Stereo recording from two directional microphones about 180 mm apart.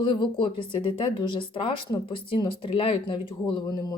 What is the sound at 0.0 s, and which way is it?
Speech, 25° left (ahead or behind).